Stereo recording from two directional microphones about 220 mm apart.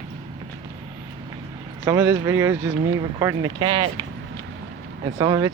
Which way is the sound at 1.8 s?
10° right (ahead or behind).